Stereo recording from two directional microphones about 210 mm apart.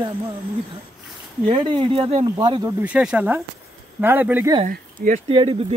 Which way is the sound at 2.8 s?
5° right (ahead or behind).